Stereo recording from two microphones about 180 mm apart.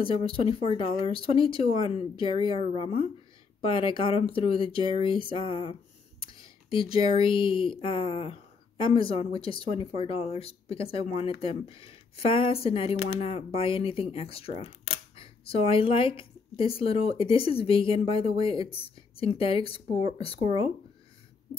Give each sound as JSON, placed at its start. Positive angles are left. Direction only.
{"t": 0.0, "sound": "speech", "side_deg": 30}